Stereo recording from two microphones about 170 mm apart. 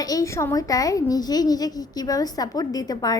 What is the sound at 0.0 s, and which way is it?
A woman's voice, 20° left (ahead or behind).